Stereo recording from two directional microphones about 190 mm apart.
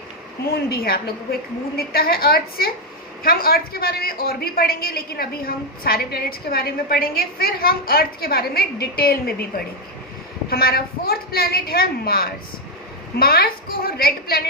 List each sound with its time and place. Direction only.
0.5 s a woman's voice: 55° left (ahead or behind)
10.5 s a woman's voice: 55° left (ahead or behind)